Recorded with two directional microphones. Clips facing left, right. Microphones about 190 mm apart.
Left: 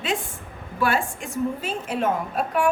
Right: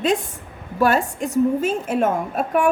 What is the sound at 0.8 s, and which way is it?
A woman's voice, 40° right (ahead or behind).